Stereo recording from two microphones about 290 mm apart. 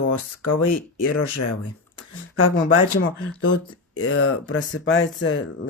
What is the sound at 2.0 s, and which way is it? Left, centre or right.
Speech, left.